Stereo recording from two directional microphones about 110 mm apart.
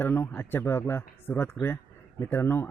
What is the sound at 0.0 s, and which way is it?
A man's voice, 20° left (ahead or behind).